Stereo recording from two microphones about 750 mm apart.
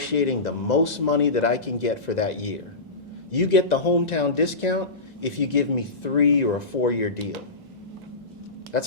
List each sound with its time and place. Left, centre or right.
0.0 s speech: left
8.7 s speech: left